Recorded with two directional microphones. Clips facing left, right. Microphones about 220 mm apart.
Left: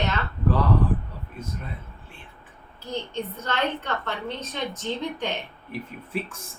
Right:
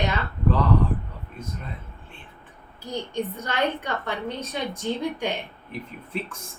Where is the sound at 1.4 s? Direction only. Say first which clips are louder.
Even; 5° left (ahead or behind).